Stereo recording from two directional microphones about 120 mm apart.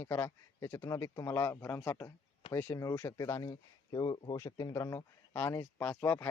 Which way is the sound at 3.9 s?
35° left (ahead or behind).